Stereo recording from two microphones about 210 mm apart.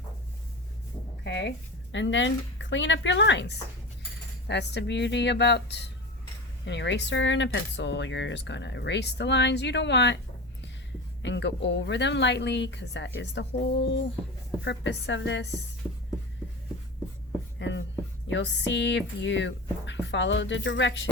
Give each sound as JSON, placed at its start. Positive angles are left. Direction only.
{"t": 1.2, "sound": "speech", "side_deg": 55}
{"t": 11.2, "sound": "speech", "side_deg": 60}
{"t": 17.6, "sound": "a sound", "side_deg": 60}
{"t": 18.3, "sound": "speech", "side_deg": 60}